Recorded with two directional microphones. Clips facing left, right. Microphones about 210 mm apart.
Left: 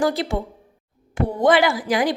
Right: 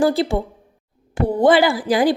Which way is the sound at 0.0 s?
30° right (ahead or behind).